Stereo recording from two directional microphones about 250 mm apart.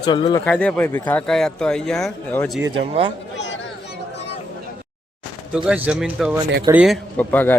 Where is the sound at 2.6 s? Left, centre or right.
Right.